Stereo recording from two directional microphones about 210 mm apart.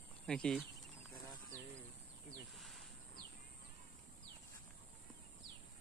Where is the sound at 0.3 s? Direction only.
5° left (ahead or behind).